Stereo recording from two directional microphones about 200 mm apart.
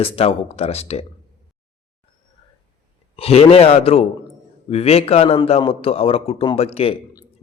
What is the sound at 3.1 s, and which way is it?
Speech, 30° left (ahead or behind).